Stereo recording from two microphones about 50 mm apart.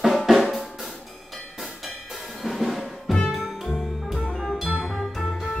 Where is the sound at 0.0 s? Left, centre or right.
Centre.